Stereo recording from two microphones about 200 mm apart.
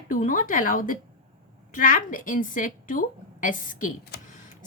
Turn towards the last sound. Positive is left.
turn(degrees=45)  # may be behind; listen again after turning